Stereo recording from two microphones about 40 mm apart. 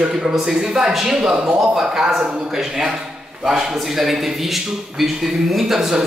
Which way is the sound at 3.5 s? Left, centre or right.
Centre.